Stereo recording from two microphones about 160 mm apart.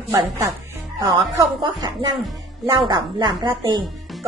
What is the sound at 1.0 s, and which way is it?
A woman's voice, 25° right (ahead or behind).